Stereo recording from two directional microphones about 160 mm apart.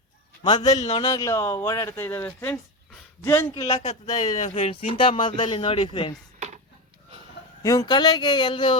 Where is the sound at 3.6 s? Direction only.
40° left (ahead or behind).